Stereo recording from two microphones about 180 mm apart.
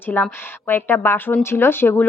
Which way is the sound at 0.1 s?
10° left (ahead or behind).